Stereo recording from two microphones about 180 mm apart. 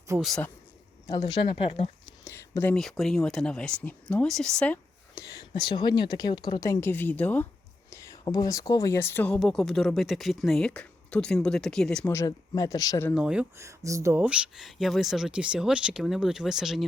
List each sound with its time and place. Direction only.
0.2 s speech: 5° left (ahead or behind)
1.0 s a woman's voice: 25° left (ahead or behind)
2.2 s speech: 10° left (ahead or behind)
2.7 s speech: centre (ahead or behind)
5.3 s a woman's voice: 25° left (ahead or behind); by 12.1 s 5° left (ahead or behind)
12.1 s a woman's voice: 20° left (ahead or behind)
13.1 s speech: 5° right (ahead or behind)
14.2 s speech: 5° right (ahead or behind)